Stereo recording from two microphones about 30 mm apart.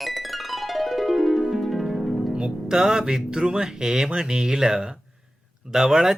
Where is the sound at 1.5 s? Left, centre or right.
Centre.